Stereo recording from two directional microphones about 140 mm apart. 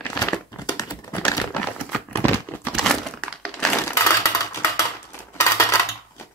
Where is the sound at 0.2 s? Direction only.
25° left (ahead or behind).